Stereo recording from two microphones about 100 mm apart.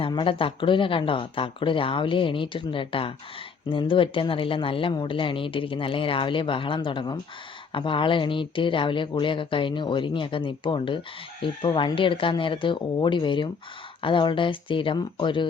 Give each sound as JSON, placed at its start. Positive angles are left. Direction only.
{"t": 0.0, "sound": "speech", "side_deg": 55}